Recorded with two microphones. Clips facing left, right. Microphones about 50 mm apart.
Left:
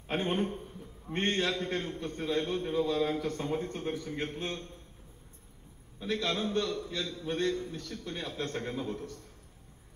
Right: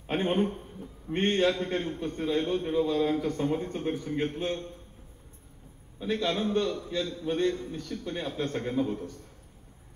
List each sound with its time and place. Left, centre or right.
0.0 s a man's voice: centre
2.1 s speech: centre
2.4 s a man's voice: right
6.3 s a man's voice: right